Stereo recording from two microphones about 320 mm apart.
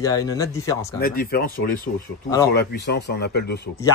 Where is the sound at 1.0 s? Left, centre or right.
Left.